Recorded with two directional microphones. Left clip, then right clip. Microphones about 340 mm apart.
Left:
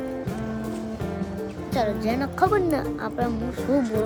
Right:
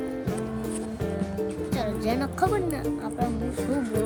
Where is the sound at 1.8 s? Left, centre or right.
Centre.